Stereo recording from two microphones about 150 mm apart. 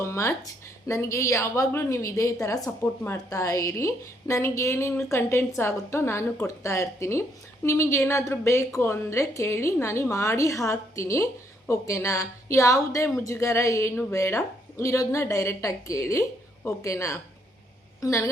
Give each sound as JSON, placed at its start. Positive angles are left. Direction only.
{"t": 0.0, "sound": "a woman's voice", "side_deg": 15}